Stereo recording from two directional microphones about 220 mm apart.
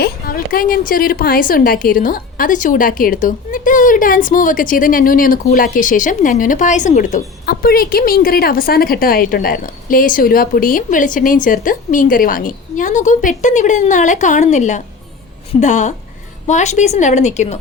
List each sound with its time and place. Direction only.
0.0 s a woman's voice: 40° left (ahead or behind)